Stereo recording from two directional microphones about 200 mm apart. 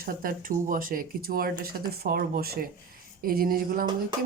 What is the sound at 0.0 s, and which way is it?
Speech, 45° right (ahead or behind).